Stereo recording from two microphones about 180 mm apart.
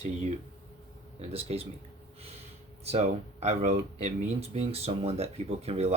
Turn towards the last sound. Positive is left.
turn(degrees=-35)  # may be behind; listen again after turning